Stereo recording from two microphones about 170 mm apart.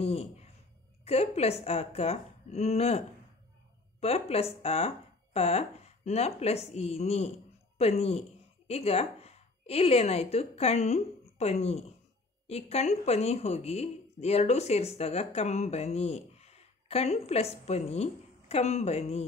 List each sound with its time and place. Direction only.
0.0 s a sound: 35° left (ahead or behind)
1.0 s a woman's voice: 35° left (ahead or behind)
4.0 s a woman's voice: 35° left (ahead or behind)